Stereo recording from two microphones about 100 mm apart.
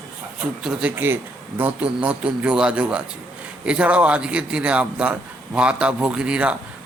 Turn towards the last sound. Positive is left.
turn(degrees=-10)  # may be behind; listen again after turning